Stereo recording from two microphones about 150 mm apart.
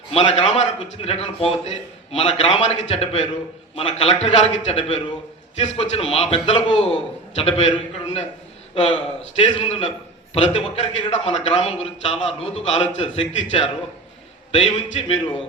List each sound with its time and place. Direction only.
0.1 s a man's voice: 45° left (ahead or behind)